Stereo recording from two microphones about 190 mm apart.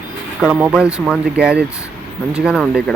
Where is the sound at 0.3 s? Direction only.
5° right (ahead or behind).